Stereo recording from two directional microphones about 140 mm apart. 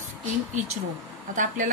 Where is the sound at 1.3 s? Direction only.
65° right (ahead or behind).